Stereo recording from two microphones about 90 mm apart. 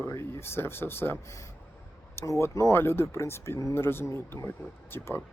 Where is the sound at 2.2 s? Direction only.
30° left (ahead or behind).